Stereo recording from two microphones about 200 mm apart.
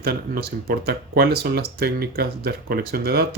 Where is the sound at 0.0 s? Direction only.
50° right (ahead or behind).